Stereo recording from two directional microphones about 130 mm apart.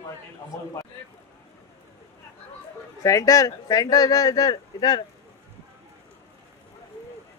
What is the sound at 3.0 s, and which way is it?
Speech, 25° left (ahead or behind).